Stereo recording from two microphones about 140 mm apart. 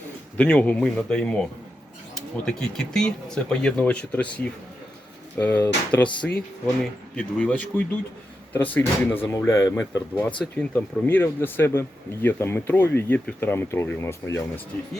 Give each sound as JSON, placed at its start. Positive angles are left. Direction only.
{"t": 0.3, "sound": "speech", "side_deg": 10}
{"t": 7.2, "sound": "speech", "side_deg": 10}